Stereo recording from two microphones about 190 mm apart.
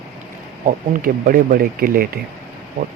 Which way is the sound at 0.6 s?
45° right (ahead or behind).